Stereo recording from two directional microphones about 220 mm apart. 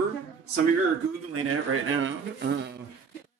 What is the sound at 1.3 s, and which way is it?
Speech, 75° right (ahead or behind).